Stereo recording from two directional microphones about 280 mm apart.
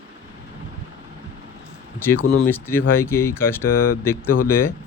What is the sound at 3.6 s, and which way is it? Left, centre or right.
Speech, left.